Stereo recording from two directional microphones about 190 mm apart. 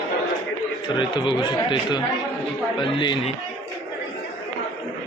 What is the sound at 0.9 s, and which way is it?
Speech, 25° left (ahead or behind).